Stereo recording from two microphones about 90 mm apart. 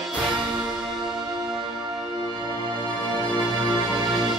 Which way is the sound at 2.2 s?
60° right (ahead or behind).